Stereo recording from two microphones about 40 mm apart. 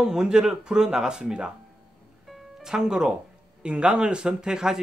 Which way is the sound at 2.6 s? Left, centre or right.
Centre.